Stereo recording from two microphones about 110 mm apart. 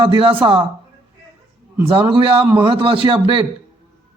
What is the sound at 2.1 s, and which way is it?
Speech, 55° right (ahead or behind).